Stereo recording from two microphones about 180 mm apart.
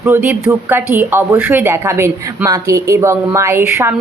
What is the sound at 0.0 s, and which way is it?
A woman's voice, 10° right (ahead or behind).